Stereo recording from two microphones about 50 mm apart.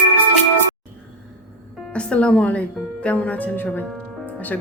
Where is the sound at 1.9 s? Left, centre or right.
Left.